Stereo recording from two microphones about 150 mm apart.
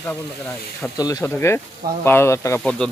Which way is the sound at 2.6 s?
5° left (ahead or behind).